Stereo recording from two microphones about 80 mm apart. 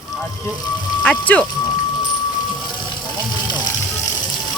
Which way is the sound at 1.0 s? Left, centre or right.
Centre.